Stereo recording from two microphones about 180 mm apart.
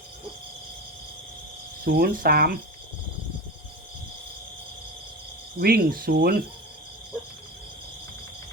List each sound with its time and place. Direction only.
1.8 s speech: 55° right (ahead or behind)
5.5 s speech: 55° right (ahead or behind)